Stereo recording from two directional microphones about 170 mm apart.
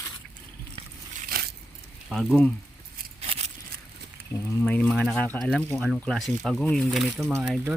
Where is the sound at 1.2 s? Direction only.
60° right (ahead or behind).